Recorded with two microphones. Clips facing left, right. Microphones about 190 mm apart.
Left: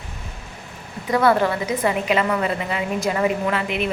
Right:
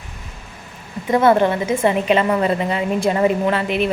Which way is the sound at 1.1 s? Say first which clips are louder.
Right 3 dB; 25° right (ahead or behind).